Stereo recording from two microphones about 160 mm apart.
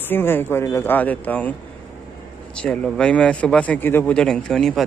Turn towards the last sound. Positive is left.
turn(degrees=5)  # may be behind; listen again after turning